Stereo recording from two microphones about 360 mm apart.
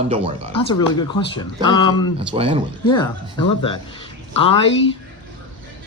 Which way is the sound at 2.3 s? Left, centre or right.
Centre.